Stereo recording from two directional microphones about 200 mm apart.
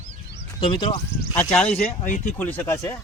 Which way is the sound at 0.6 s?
25° left (ahead or behind).